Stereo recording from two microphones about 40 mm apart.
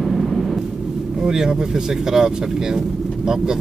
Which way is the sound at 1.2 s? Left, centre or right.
Centre.